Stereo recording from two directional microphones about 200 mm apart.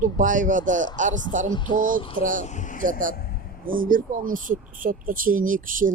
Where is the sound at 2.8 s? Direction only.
40° right (ahead or behind).